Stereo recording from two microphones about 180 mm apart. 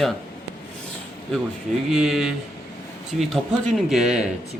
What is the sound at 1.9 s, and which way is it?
Speech, centre (ahead or behind).